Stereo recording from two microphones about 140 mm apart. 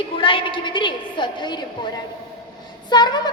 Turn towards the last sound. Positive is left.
turn(degrees=30)  # may be behind; listen again after turning